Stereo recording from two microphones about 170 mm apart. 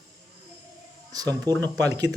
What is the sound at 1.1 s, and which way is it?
Speech, 20° right (ahead or behind).